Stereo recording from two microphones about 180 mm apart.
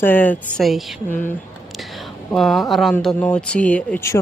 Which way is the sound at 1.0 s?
10° left (ahead or behind).